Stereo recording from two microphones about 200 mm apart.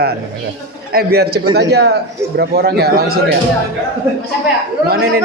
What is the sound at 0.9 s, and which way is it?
A man's voice, 55° right (ahead or behind).